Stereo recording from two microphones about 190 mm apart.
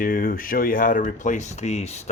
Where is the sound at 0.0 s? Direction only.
45° left (ahead or behind).